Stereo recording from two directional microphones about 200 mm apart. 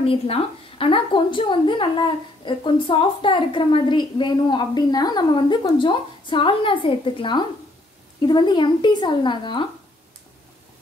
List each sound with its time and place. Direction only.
0.0 s a woman's voice: 30° left (ahead or behind)